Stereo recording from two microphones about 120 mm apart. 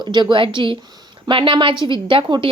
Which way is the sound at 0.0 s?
40° right (ahead or behind).